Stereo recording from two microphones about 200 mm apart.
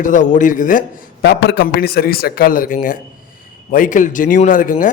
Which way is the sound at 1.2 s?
55° left (ahead or behind).